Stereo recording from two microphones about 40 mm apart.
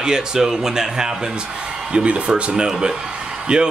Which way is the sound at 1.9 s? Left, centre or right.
Right.